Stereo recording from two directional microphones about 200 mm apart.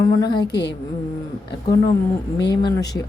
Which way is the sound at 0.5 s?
60° left (ahead or behind).